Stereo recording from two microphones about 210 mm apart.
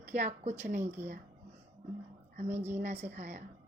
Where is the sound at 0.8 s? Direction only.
10° right (ahead or behind).